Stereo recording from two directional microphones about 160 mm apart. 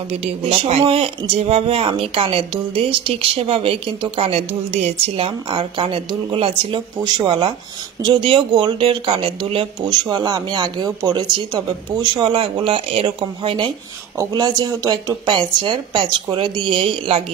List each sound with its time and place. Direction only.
0.1 s speech: 40° right (ahead or behind)